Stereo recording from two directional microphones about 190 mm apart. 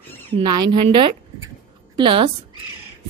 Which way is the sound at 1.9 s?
25° right (ahead or behind).